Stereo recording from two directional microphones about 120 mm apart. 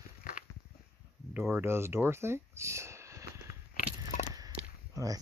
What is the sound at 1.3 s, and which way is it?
Speech, 15° right (ahead or behind).